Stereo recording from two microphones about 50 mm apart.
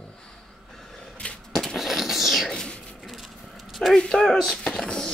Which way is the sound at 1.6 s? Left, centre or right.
Centre.